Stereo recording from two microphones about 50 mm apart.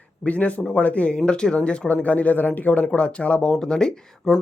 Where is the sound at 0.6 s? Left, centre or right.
Centre.